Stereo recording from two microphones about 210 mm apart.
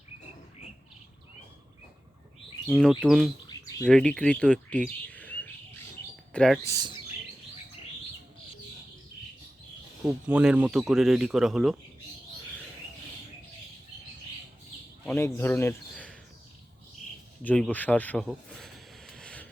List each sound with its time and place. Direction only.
2.7 s a man's voice: 5° left (ahead or behind)
6.7 s speech: 20° right (ahead or behind)
10.0 s a man's voice: 5° right (ahead or behind)
15.0 s speech: 10° left (ahead or behind)
17.4 s speech: 5° left (ahead or behind)
18.3 s a sound: centre (ahead or behind)